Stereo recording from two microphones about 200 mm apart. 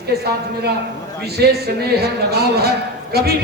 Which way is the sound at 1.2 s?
55° right (ahead or behind).